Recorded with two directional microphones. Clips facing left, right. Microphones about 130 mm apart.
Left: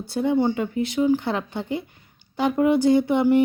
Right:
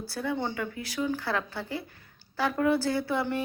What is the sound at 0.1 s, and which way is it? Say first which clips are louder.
Speech: left 11 dB; 20° left (ahead or behind).